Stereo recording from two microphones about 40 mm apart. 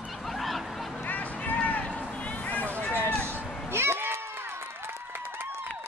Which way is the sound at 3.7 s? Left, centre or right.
Right.